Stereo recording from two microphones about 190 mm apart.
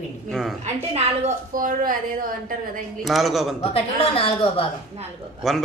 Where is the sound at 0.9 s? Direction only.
40° right (ahead or behind).